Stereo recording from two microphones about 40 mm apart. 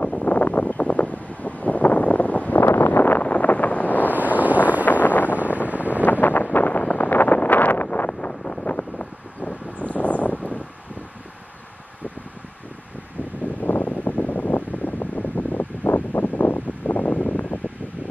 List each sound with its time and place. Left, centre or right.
0.0 s wind noise: left
0.3 s wind noise: left
2.6 s wind noise: left
4.1 s wind noise: right
5.0 s wind noise: left
5.7 s wind noise: right
6.2 s wind noise: left
8.6 s wind: left
9.8 s a sound: left
13.7 s wind: left